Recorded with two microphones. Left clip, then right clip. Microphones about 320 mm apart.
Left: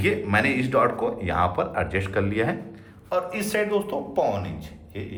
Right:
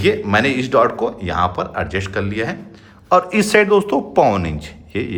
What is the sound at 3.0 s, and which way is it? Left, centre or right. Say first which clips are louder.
A man's voice: right 12 dB; centre.